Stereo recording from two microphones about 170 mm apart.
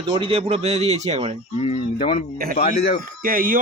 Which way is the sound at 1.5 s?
35° left (ahead or behind).